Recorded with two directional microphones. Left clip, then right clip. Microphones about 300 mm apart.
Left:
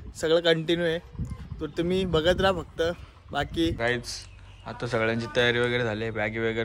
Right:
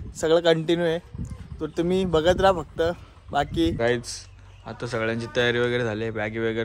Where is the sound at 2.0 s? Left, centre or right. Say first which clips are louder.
Right 4 dB; right.